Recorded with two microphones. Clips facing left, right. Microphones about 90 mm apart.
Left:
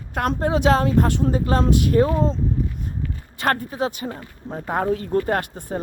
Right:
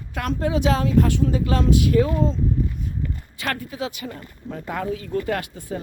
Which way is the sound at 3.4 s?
45° left (ahead or behind).